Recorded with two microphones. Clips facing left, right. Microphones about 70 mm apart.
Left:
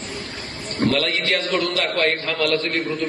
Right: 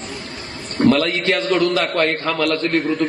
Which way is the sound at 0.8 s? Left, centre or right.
Right.